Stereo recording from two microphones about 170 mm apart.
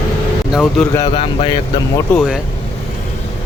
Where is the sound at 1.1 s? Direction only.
30° left (ahead or behind).